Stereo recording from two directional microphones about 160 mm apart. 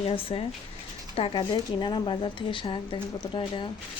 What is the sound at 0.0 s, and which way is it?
Speech, 35° left (ahead or behind).